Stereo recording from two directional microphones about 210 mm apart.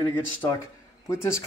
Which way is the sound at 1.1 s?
15° left (ahead or behind).